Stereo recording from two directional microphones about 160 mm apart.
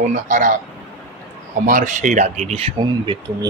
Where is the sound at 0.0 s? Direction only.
50° right (ahead or behind).